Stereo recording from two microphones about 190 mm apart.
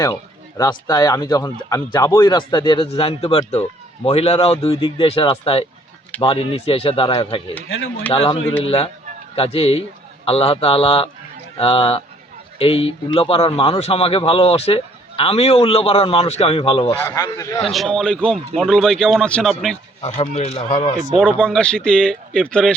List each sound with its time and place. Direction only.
0.0 s a man's voice: 15° left (ahead or behind)
16.9 s a man's voice: 15° left (ahead or behind)
17.6 s speech: centre (ahead or behind)
20.0 s a man's voice: 35° left (ahead or behind)
21.2 s speech: 5° left (ahead or behind)